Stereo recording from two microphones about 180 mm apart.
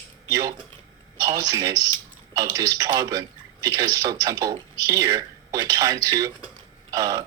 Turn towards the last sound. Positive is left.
turn(degrees=-20)  # may be behind; listen again after turning